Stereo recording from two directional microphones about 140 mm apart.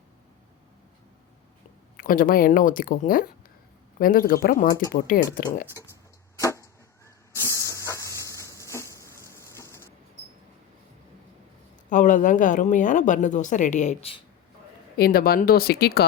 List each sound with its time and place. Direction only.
2.0 s speech: 85° left
6.4 s hiss: 20° left (ahead or behind)
8.3 s a sound: 20° right (ahead or behind)
8.5 s a sound: 20° left (ahead or behind)
11.9 s speech: 65° left (ahead or behind)
14.9 s speech: 90° left